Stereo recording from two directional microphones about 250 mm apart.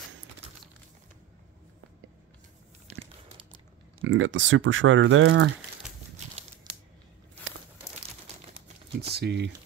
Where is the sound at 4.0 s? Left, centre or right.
Right.